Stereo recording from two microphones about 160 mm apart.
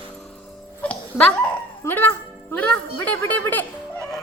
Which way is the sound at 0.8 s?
10° left (ahead or behind).